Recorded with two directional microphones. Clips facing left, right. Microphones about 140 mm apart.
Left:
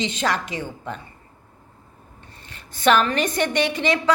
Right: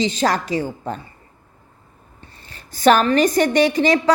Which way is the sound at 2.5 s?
35° right (ahead or behind).